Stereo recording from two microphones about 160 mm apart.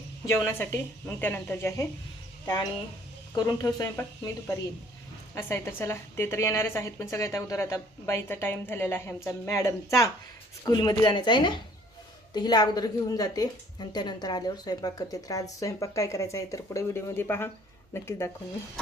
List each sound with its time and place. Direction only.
0.4 s a woman's voice: 15° left (ahead or behind)
3.3 s a woman's voice: 25° left (ahead or behind)